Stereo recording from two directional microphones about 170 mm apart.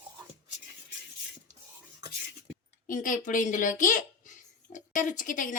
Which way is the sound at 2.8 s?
50° left (ahead or behind).